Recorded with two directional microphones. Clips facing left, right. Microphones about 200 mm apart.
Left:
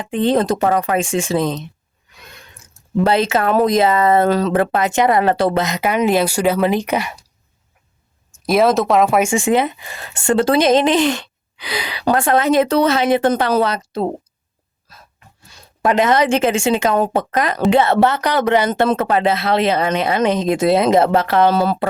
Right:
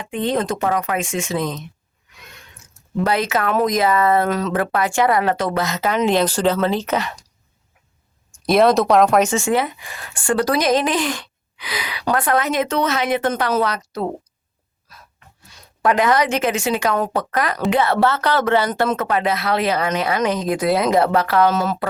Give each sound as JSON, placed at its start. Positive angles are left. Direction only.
{"t": 0.0, "sound": "speech", "side_deg": 35}
{"t": 3.0, "sound": "speech", "side_deg": 30}
{"t": 5.6, "sound": "speech", "side_deg": 15}
{"t": 8.4, "sound": "speech", "side_deg": 0}
{"t": 15.6, "sound": "speech", "side_deg": 25}